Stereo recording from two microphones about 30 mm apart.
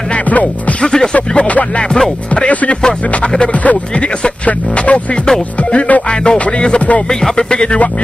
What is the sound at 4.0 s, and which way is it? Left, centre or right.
Speech, left.